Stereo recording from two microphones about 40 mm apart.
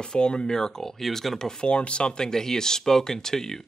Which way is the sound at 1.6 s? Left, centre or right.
Left.